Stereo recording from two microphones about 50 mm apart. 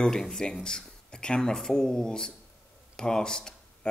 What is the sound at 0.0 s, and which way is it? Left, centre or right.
Speech, centre.